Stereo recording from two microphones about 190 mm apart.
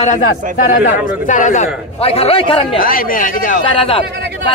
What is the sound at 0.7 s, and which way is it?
A man's voice, 40° left (ahead or behind).